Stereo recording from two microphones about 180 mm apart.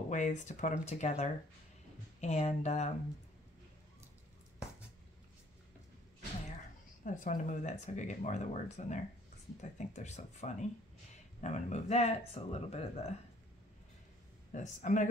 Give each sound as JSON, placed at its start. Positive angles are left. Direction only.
{"t": 0.1, "sound": "speech", "side_deg": 40}
{"t": 7.1, "sound": "speech", "side_deg": 45}
{"t": 14.5, "sound": "speech", "side_deg": 45}